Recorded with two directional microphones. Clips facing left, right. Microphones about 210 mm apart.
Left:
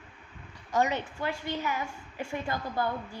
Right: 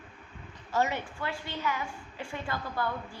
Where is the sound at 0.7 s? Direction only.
15° left (ahead or behind).